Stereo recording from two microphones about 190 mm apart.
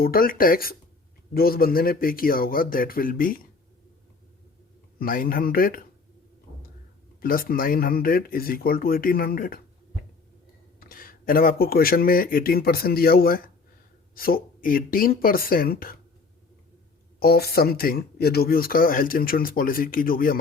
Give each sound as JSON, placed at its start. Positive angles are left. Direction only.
{"t": 0.0, "sound": "speech", "side_deg": 50}
{"t": 4.9, "sound": "speech", "side_deg": 50}
{"t": 7.2, "sound": "speech", "side_deg": 50}
{"t": 10.8, "sound": "speech", "side_deg": 50}
{"t": 17.2, "sound": "speech", "side_deg": 55}